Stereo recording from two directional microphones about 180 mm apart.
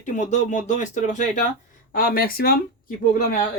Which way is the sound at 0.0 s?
40° left (ahead or behind).